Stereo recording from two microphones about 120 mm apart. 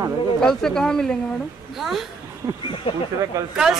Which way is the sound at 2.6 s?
45° left (ahead or behind).